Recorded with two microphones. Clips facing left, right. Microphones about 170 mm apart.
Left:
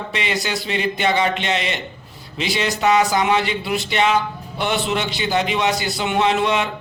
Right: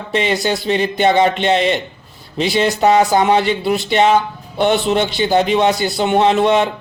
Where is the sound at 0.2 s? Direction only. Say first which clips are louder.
Right 7 dB; 40° right (ahead or behind).